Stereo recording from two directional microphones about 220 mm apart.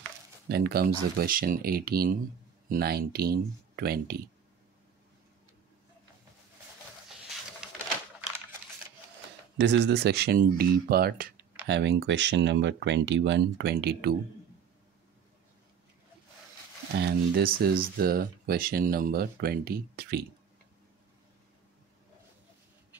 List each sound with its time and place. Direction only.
0.5 s speech: 45° right (ahead or behind)
9.6 s speech: 50° right (ahead or behind)
16.9 s speech: 45° right (ahead or behind)